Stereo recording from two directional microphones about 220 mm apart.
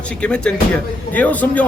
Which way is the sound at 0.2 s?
5° left (ahead or behind).